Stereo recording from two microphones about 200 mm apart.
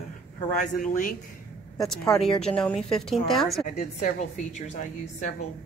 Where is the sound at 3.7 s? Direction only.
35° left (ahead or behind).